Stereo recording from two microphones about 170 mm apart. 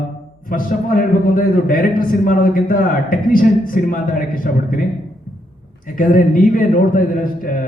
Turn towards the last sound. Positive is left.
turn(degrees=55)  # may be behind; listen again after turning